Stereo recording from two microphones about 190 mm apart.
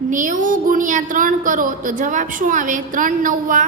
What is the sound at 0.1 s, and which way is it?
A woman's voice, 40° right (ahead or behind).